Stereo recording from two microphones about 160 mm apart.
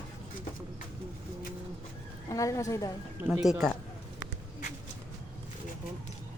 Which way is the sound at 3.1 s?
5° right (ahead or behind).